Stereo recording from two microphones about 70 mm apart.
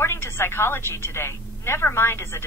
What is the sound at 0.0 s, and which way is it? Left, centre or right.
Speech, left.